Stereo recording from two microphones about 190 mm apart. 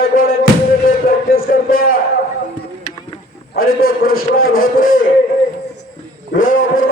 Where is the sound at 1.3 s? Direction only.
50° left (ahead or behind).